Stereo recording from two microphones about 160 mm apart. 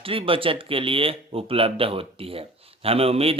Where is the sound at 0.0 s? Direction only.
35° right (ahead or behind).